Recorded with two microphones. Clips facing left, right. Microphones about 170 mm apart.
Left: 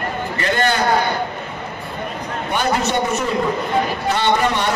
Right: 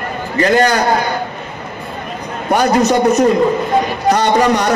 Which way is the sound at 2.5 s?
40° right (ahead or behind).